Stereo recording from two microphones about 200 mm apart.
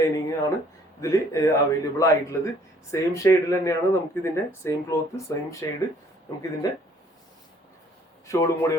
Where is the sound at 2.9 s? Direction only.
15° left (ahead or behind).